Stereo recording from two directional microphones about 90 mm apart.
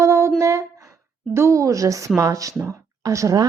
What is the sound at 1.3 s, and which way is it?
Speech, 30° right (ahead or behind).